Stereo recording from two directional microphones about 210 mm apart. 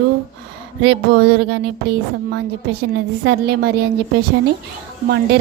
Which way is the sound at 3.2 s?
50° right (ahead or behind).